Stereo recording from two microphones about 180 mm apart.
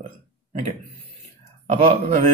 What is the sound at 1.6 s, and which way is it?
Speech, 35° right (ahead or behind).